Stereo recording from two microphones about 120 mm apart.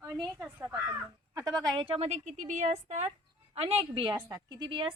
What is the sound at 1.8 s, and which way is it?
A woman's voice, 55° right (ahead or behind).